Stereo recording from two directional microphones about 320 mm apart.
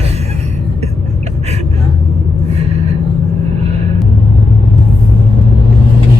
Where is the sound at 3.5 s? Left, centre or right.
Centre.